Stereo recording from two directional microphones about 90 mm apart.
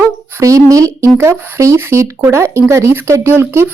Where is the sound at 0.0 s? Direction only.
35° right (ahead or behind).